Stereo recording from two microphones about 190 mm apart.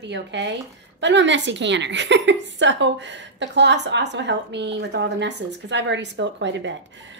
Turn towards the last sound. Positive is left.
turn(degrees=-70)  # may be behind; listen again after turning